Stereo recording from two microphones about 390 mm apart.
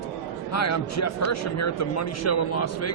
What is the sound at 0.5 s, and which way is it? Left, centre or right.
Speech, left.